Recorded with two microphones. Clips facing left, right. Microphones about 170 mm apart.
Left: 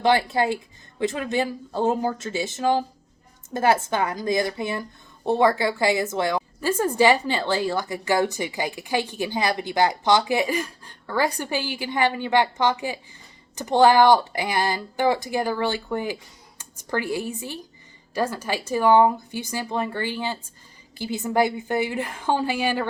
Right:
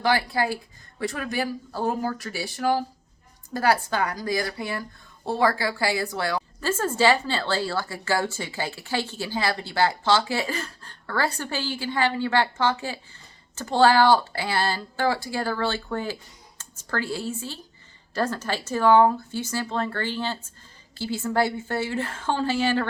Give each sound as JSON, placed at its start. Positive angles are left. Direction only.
{"t": 0.0, "sound": "a woman's voice", "side_deg": 25}